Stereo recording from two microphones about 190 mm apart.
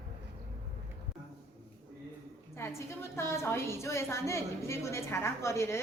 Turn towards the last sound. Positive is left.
turn(degrees=15)  # may be behind; listen again after turning